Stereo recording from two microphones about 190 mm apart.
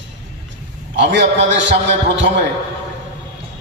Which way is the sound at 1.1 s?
70° right (ahead or behind).